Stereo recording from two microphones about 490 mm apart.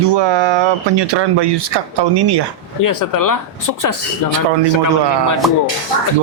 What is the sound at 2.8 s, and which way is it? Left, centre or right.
Speech, left.